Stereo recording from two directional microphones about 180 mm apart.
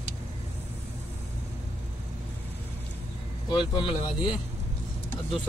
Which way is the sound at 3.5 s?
25° left (ahead or behind).